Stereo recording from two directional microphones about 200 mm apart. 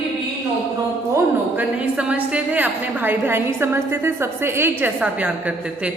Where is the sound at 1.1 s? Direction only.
10° right (ahead or behind).